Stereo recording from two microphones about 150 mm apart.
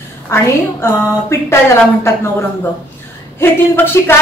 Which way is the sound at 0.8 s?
15° left (ahead or behind).